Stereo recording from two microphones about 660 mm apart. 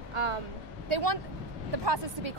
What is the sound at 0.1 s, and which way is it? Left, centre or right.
A child's voice, right.